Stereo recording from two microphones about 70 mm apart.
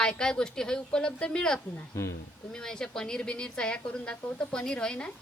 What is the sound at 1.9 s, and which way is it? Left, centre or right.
Speech, left.